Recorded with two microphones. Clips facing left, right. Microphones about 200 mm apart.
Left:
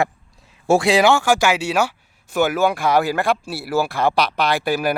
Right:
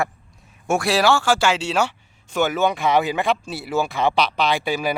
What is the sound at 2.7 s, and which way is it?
Speech, centre (ahead or behind).